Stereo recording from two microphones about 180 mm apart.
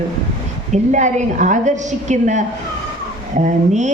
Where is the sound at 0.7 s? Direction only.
40° right (ahead or behind).